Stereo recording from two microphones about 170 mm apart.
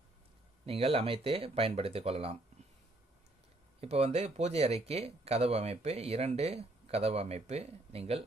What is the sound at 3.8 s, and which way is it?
Speech, 40° right (ahead or behind).